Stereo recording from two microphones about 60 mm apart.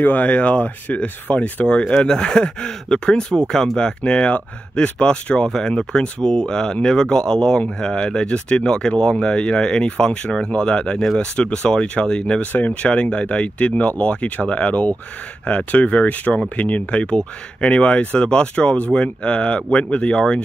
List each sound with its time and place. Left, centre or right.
0.0 s speech: left